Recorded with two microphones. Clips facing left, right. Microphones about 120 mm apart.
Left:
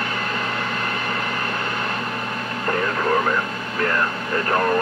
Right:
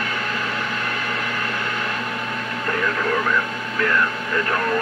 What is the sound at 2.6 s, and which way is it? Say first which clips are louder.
Radio: left 2 dB; 35° left (ahead or behind).